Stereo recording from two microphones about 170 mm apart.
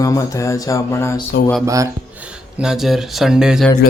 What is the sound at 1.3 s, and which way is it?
Speech, 90° left.